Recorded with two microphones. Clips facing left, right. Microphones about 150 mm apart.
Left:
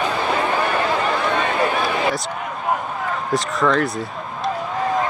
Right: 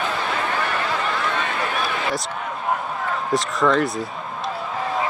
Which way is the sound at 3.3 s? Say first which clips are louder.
Even; centre (ahead or behind).